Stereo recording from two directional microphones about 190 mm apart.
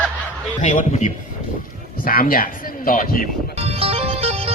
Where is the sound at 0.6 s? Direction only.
40° left (ahead or behind).